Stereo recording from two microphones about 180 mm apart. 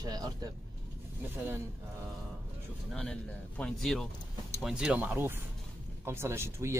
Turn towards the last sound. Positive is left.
turn(degrees=-15)  # may be behind; listen again after turning